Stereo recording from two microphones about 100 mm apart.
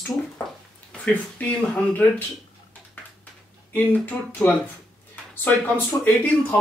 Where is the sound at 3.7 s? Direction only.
20° left (ahead or behind).